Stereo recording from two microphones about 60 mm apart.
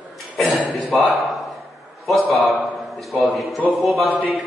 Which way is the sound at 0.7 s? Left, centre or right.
Centre.